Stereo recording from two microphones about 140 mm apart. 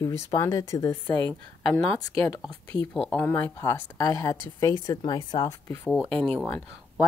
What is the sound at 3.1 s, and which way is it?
Speech, 15° left (ahead or behind).